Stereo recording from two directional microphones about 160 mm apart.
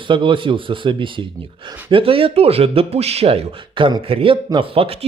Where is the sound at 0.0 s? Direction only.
30° right (ahead or behind).